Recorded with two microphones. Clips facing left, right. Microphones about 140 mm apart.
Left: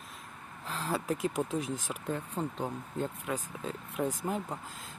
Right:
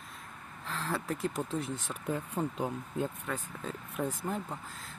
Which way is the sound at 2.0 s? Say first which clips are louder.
Right 2 dB; 10° right (ahead or behind).